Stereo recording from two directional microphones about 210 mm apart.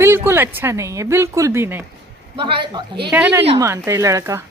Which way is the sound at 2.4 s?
25° right (ahead or behind).